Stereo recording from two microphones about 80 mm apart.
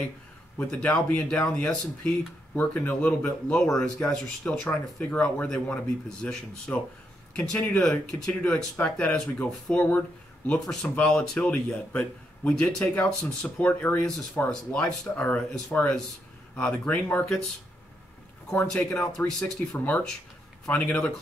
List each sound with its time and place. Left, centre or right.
0.6 s a man's voice: centre
2.5 s a man's voice: left
9.4 s speech: left
10.6 s a man's voice: centre
18.5 s a man's voice: centre